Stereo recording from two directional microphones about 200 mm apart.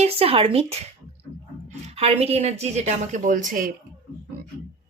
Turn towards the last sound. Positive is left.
turn(degrees=-40)  # may be behind; listen again after turning